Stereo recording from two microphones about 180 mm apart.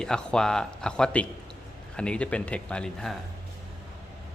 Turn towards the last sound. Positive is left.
turn(degrees=5)  # may be behind; listen again after turning